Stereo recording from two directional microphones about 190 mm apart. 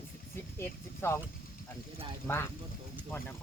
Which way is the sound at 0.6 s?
15° left (ahead or behind).